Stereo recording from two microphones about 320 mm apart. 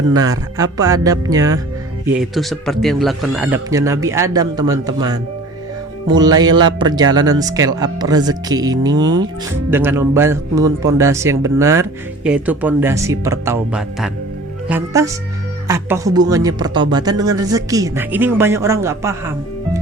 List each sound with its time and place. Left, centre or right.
0.5 s speech: centre
2.3 s speech: centre